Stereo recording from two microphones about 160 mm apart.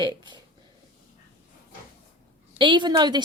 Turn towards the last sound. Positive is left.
turn(degrees=-25)  # may be behind; listen again after turning